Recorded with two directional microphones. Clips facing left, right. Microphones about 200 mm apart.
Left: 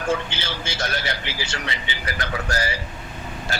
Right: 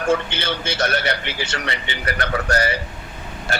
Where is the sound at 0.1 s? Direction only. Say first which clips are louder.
Right 5 dB; 60° right (ahead or behind).